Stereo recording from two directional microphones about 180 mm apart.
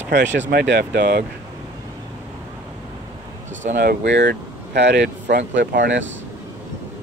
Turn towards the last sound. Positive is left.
turn(degrees=-75)  # may be behind; listen again after turning